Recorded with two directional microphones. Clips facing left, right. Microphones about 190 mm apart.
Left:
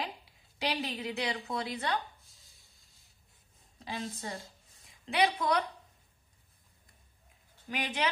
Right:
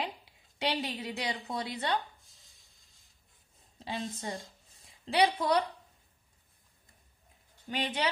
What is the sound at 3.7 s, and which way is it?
Speech, 25° right (ahead or behind).